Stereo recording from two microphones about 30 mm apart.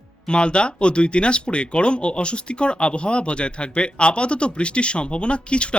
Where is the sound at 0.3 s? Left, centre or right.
Left.